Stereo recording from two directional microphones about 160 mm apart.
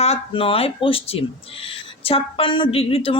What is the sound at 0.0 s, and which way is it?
A woman's voice, 40° left (ahead or behind).